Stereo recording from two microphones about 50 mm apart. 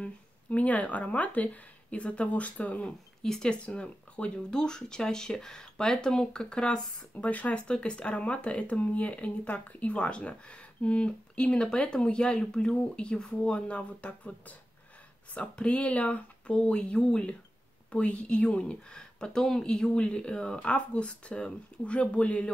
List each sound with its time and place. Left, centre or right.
0.0 s speech: left
3.2 s speech: centre
3.6 s speech: left
7.2 s speech: left
15.3 s speech: left